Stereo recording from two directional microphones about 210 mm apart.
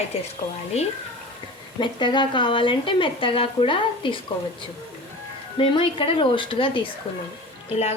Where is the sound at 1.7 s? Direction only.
20° left (ahead or behind).